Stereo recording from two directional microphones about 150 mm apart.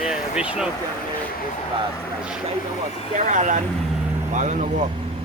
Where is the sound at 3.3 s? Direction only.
55° right (ahead or behind).